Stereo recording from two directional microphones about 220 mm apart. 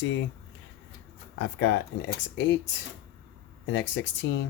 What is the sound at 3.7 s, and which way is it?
Speech, 55° left (ahead or behind).